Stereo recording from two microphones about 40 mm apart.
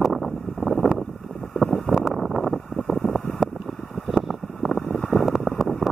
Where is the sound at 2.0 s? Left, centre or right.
Centre.